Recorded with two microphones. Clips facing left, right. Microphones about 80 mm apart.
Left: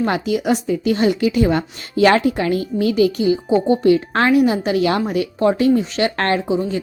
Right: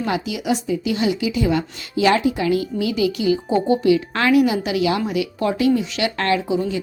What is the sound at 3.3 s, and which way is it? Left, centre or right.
Speech, left.